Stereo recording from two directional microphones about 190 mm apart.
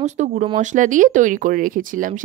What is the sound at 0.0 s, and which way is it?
Speech, 35° right (ahead or behind).